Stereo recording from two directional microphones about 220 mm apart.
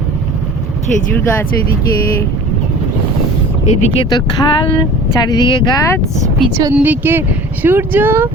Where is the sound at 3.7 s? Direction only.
30° left (ahead or behind).